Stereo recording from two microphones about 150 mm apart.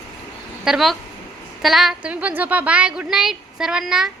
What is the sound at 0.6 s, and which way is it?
A woman's voice, centre (ahead or behind).